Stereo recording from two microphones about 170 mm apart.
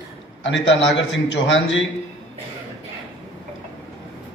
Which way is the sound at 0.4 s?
90° left.